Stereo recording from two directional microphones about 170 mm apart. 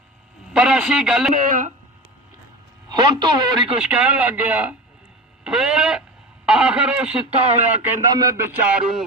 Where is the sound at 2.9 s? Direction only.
25° right (ahead or behind).